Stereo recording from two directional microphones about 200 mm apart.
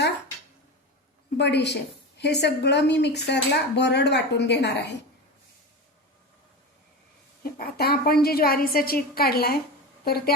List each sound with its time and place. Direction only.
1.4 s a woman's voice: 60° left (ahead or behind)
7.8 s a woman's voice: 50° left (ahead or behind)